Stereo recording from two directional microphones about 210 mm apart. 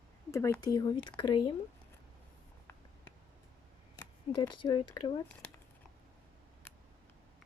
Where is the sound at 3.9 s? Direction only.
20° left (ahead or behind).